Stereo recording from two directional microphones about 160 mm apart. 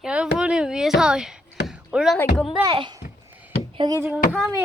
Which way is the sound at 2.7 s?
30° right (ahead or behind).